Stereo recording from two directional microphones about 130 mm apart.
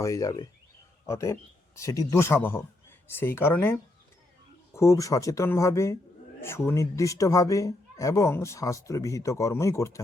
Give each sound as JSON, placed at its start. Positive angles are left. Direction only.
{"t": 0.0, "sound": "speech", "side_deg": 25}